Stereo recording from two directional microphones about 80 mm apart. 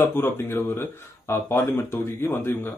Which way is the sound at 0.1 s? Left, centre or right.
Left.